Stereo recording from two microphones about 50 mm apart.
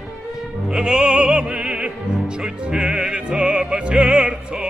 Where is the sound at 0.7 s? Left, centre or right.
Centre.